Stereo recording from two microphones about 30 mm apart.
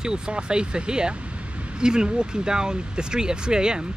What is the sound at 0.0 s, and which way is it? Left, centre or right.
Speech, right.